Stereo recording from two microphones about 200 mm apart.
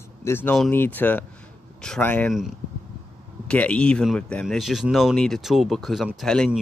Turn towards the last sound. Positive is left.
turn(degrees=0)  # may be behind; listen again after turning